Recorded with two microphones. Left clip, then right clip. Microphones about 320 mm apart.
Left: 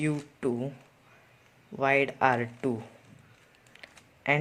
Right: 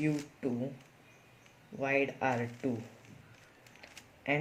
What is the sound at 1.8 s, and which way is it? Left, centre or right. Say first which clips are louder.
Speech: left 7 dB; left.